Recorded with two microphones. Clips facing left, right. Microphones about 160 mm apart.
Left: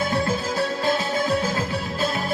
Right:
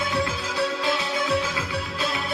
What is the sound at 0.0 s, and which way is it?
Music, 45° left (ahead or behind).